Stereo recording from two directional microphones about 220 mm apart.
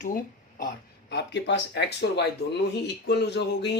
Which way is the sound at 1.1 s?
50° left (ahead or behind).